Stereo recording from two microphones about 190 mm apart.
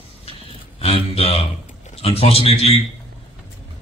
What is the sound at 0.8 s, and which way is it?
A man's voice, 30° left (ahead or behind).